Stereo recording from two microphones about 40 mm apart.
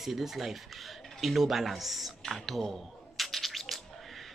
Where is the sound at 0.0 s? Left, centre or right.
Centre.